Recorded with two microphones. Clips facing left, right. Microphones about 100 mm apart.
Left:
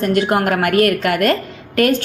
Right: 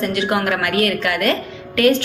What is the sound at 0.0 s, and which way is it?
Speech, 45° left (ahead or behind).